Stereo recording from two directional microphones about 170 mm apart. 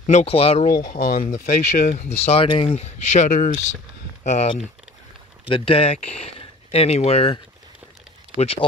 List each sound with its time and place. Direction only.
0.0 s speech: 40° left (ahead or behind)
0.9 s speech: 60° left (ahead or behind); by 4.5 s 45° left (ahead or behind)
5.5 s speech: 35° left (ahead or behind)
8.4 s speech: 35° left (ahead or behind)